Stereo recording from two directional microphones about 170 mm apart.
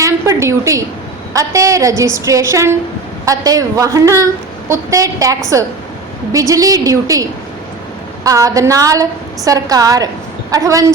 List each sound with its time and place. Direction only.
0.0 s a sound: 20° right (ahead or behind)
1.3 s a woman's voice: 20° right (ahead or behind)
6.5 s a woman's voice: 20° right (ahead or behind)